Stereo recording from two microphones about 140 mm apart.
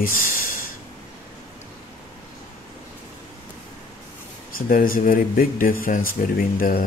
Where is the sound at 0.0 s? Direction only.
90° left.